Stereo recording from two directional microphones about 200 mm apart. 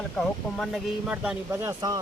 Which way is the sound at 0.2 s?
Centre (ahead or behind).